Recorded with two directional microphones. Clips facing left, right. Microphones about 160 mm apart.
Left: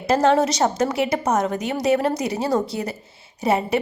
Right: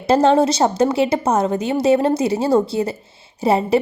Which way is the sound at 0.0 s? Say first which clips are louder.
Right 4 dB; 30° right (ahead or behind).